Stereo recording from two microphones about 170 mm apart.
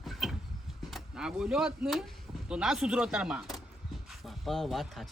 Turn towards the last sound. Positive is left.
turn(degrees=0)  # may be behind; listen again after turning